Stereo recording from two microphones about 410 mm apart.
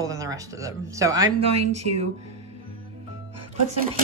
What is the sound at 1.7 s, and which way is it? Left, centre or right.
Speech, right.